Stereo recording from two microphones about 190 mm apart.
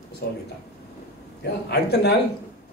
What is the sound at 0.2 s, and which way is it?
Speech, 55° left (ahead or behind).